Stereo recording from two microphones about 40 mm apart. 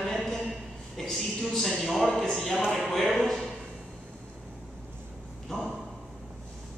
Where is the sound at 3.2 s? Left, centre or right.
Centre.